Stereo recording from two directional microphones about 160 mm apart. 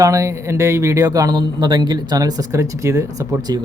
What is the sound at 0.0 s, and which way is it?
Speech, 20° right (ahead or behind).